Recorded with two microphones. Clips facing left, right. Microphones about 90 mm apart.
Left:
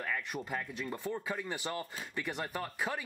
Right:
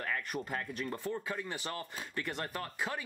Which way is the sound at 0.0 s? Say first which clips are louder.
Even; centre (ahead or behind).